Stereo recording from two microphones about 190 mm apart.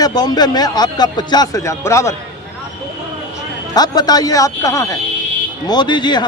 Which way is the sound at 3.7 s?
20° left (ahead or behind).